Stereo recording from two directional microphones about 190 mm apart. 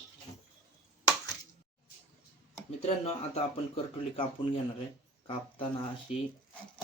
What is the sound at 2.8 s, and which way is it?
Speech, 35° left (ahead or behind).